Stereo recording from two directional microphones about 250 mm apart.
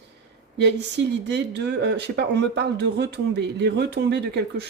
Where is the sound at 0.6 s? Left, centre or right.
Right.